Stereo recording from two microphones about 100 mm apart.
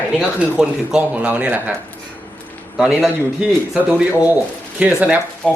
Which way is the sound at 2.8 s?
5° right (ahead or behind).